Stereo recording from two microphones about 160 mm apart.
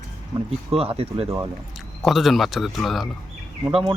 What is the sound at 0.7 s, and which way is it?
Speech, 35° right (ahead or behind).